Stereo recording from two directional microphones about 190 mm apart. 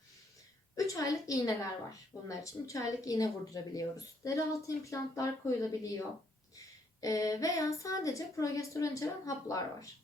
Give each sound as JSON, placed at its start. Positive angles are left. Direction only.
{"t": 0.9, "sound": "a woman's voice", "side_deg": 15}